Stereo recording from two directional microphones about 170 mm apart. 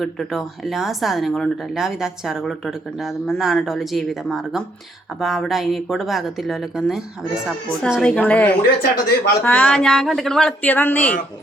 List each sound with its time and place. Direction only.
0.0 s speech: centre (ahead or behind)
8.8 s speech: 70° left (ahead or behind)
9.4 s speech: 10° left (ahead or behind)